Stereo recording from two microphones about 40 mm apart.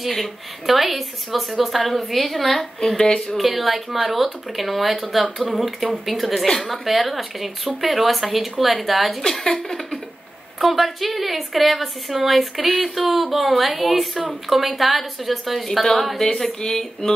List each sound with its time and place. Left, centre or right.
0.0 s a woman's voice: centre
3.0 s speech: centre
3.3 s a woman's voice: centre
6.4 s speech: centre
6.7 s a woman's voice: centre
9.2 s a woman's voice: centre